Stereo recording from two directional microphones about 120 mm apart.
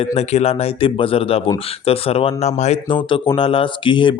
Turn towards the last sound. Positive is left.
turn(degrees=40)  # may be behind; listen again after turning